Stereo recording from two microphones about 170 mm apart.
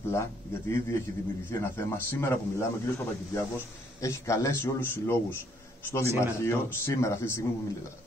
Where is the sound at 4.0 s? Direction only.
20° left (ahead or behind).